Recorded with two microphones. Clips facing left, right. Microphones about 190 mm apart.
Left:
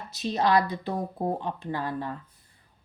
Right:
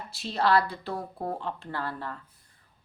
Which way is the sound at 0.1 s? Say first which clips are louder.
Left 1 dB; 20° left (ahead or behind).